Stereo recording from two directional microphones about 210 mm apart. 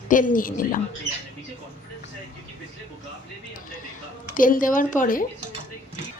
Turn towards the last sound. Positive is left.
turn(degrees=40)  # may be behind; listen again after turning